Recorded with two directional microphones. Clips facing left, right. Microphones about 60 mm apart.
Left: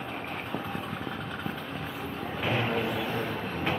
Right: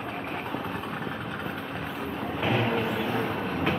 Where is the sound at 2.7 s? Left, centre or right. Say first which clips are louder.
Right 2 dB; centre.